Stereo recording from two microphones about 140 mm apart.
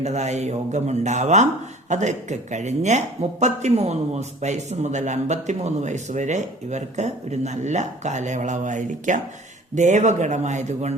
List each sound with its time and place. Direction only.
0.0 s a man's voice: 55° right (ahead or behind)